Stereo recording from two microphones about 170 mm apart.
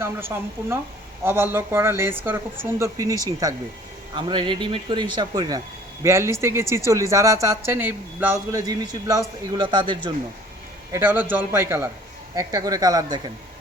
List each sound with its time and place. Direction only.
0.0 s speech: 15° right (ahead or behind)
10.9 s speech: 10° right (ahead or behind)